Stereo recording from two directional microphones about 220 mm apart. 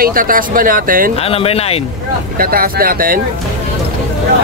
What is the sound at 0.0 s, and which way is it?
Speech, 40° right (ahead or behind).